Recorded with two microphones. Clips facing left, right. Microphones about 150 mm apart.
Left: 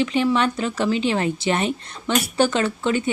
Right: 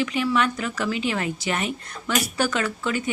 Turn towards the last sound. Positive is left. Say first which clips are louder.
# left 4 dB
turn(degrees=25)  # may be behind; listen again after turning